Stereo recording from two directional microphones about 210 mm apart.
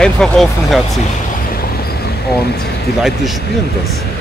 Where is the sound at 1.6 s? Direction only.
50° left (ahead or behind).